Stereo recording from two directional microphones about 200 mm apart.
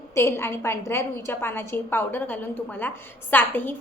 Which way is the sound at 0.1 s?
15° left (ahead or behind).